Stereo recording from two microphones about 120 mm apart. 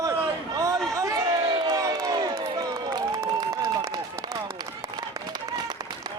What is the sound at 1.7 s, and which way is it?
Crowd, 30° right (ahead or behind).